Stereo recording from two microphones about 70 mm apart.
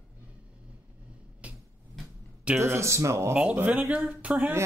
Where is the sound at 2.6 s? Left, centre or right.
Right.